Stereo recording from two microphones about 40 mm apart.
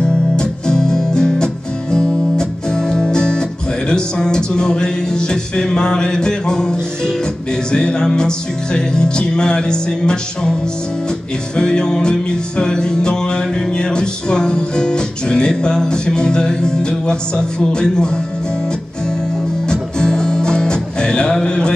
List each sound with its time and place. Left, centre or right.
0.0 s music: centre
11.5 s music: left
19.7 s music: centre